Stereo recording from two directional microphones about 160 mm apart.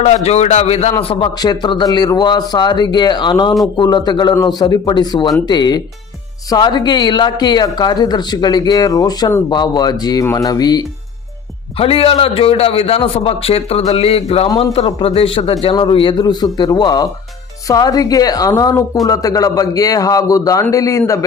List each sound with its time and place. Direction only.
0.0 s a man's voice: 45° left (ahead or behind); by 10.8 s 25° left (ahead or behind)
11.8 s a man's voice: 35° left (ahead or behind); by 21.0 s 20° left (ahead or behind)